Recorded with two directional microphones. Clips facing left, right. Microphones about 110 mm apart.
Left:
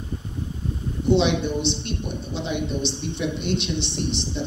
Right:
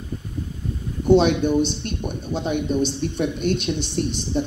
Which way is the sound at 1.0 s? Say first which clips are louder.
Right 4 dB; 45° right (ahead or behind).